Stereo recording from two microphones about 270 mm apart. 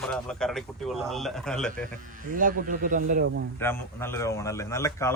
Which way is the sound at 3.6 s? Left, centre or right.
Centre.